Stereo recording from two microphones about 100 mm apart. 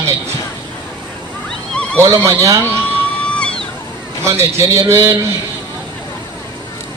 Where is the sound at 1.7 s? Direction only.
10° left (ahead or behind).